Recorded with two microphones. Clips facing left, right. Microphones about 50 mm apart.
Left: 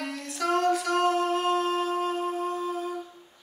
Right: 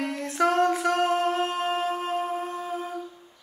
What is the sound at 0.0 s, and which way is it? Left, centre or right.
Humming, right.